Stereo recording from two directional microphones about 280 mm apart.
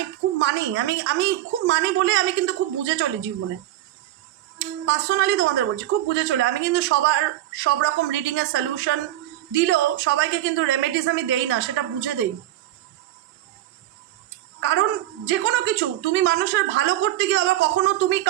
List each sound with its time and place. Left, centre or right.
0.3 s a woman's voice: right
4.5 s a woman's voice: right
14.6 s a sound: right
15.3 s a woman's voice: right